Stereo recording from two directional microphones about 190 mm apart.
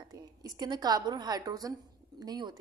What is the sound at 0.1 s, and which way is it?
A woman's voice, 20° right (ahead or behind).